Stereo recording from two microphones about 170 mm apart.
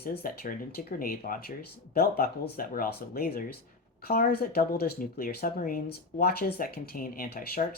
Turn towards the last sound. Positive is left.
turn(degrees=60)  # may be behind; listen again after turning